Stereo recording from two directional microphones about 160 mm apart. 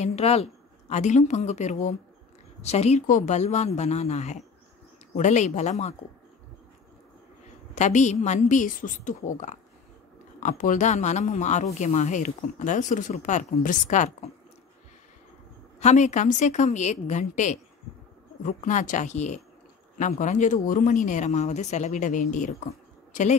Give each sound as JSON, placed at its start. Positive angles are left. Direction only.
{"t": 0.0, "sound": "speech", "side_deg": 40}
{"t": 7.7, "sound": "speech", "side_deg": 45}
{"t": 15.8, "sound": "a woman's voice", "side_deg": 45}